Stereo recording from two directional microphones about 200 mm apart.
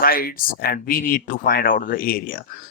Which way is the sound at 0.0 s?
45° left (ahead or behind).